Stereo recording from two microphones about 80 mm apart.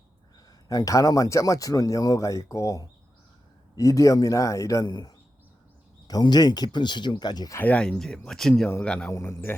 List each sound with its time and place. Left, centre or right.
0.7 s speech: left
4.9 s speech: left
6.2 s speech: left
7.6 s speech: centre
9.1 s a man's voice: left